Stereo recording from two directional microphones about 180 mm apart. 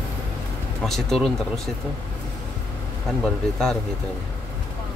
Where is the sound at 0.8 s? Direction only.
Centre (ahead or behind).